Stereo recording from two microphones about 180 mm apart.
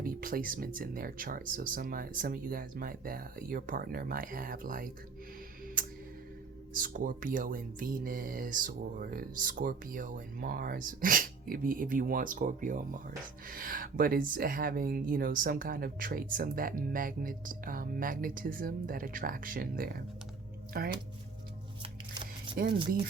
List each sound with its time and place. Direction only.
0.0 s speech: 55° right (ahead or behind)
6.7 s speech: 50° right (ahead or behind)
22.6 s speech: 60° right (ahead or behind)